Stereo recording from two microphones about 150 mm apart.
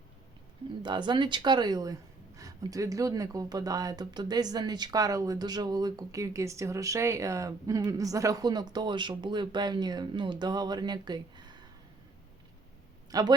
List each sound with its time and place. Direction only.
0.8 s speech: 30° right (ahead or behind)
13.1 s speech: 25° right (ahead or behind)